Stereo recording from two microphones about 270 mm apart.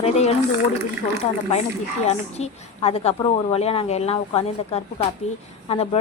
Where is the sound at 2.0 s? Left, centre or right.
Left.